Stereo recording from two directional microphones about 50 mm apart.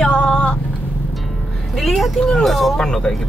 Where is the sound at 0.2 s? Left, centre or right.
Left.